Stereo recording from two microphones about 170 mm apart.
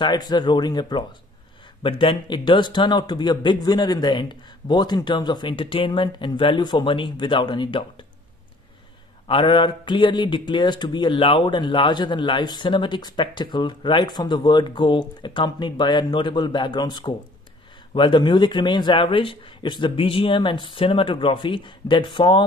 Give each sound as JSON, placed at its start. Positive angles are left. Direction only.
{"t": 0.0, "sound": "speech", "side_deg": 25}
{"t": 9.3, "sound": "speech", "side_deg": 30}